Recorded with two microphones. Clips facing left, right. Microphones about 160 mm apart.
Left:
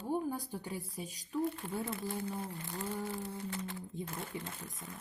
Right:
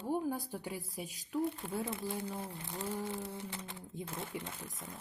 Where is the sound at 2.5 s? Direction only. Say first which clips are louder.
Even; 15° right (ahead or behind).